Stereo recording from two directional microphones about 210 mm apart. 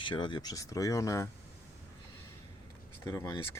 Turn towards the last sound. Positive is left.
turn(degrees=15)  # may be behind; listen again after turning